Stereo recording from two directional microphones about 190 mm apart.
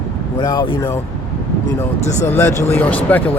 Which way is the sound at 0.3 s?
25° left (ahead or behind).